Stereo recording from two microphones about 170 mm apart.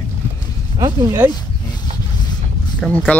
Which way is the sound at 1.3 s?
25° left (ahead or behind).